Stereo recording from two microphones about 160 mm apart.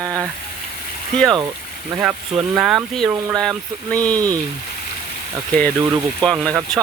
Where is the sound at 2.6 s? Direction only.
5° right (ahead or behind).